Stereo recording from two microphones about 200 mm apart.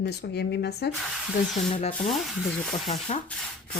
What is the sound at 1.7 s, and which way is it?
Speech, 35° left (ahead or behind).